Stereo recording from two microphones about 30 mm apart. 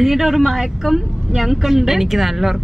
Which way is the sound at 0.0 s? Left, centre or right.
Centre.